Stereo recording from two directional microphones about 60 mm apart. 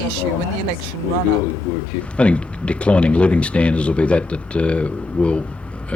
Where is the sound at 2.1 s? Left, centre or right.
Centre.